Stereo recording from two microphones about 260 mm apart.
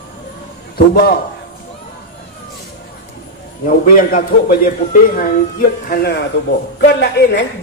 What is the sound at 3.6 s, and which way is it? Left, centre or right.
A man's voice, left.